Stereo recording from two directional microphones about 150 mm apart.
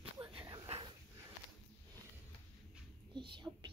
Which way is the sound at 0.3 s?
35° right (ahead or behind).